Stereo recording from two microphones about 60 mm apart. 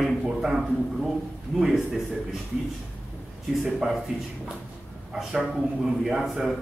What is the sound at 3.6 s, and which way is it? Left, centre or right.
Speech, centre.